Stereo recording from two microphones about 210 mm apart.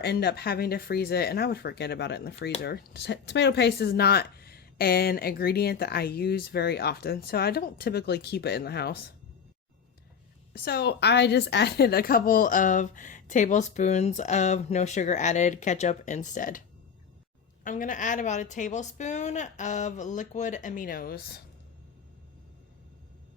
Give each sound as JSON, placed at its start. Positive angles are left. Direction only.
{"t": 0.0, "sound": "speech", "side_deg": 50}
{"t": 10.5, "sound": "speech", "side_deg": 45}